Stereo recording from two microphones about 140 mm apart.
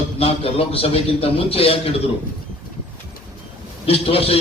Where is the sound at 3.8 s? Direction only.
45° left (ahead or behind).